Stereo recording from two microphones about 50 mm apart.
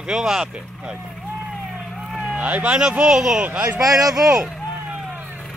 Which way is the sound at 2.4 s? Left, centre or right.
Right.